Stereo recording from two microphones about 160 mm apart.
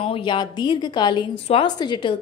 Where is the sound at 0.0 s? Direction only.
30° left (ahead or behind).